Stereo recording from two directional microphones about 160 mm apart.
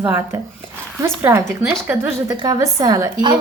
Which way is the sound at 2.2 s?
25° right (ahead or behind).